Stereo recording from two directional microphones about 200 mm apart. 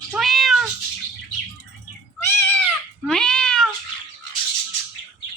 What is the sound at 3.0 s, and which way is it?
Cat, 5° left (ahead or behind).